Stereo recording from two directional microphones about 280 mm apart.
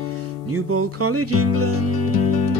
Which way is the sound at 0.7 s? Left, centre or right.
Right.